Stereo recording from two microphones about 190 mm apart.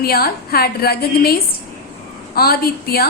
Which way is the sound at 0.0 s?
50° left (ahead or behind).